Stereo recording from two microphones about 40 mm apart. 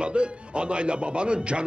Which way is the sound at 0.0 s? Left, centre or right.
Right.